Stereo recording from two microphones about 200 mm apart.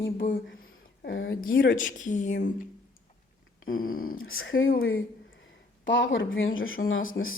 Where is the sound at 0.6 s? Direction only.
50° left (ahead or behind).